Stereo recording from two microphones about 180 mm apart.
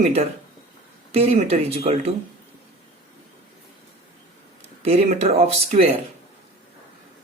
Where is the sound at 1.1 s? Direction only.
35° right (ahead or behind).